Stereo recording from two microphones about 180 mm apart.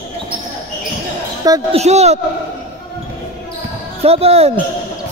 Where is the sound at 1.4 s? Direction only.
20° right (ahead or behind).